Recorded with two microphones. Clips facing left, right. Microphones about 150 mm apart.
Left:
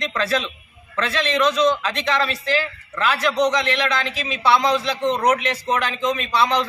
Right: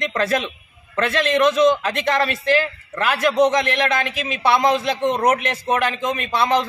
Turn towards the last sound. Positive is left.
turn(degrees=-50)  # may be behind; listen again after turning